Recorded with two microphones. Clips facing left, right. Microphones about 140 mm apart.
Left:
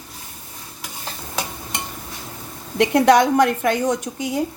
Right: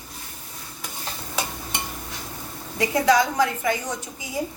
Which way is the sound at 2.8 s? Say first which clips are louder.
Left 5 dB; 65° left (ahead or behind).